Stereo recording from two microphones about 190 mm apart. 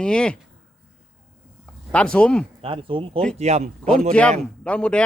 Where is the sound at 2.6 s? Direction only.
30° right (ahead or behind).